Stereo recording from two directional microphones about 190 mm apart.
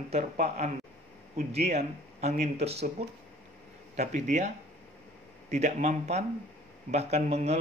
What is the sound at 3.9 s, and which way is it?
Speech, 40° right (ahead or behind).